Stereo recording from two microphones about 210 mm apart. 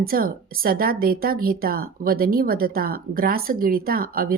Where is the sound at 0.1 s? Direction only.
45° right (ahead or behind).